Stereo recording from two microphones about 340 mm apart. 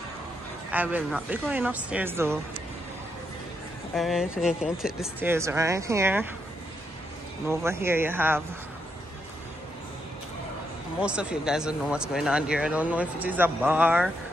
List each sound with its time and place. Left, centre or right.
0.7 s speech: centre
3.9 s speech: centre
7.4 s speech: centre
11.0 s speech: centre